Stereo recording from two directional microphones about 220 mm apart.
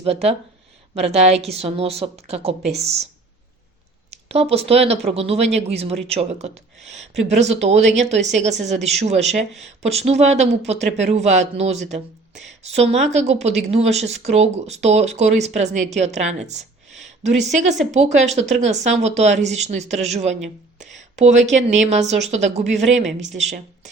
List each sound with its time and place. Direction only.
0.0 s speech: 30° right (ahead or behind)
4.1 s a sound: 30° right (ahead or behind)
4.7 s speech: 25° right (ahead or behind)